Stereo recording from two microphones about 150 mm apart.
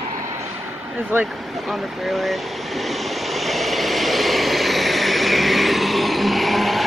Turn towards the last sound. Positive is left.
turn(degrees=0)  # may be behind; listen again after turning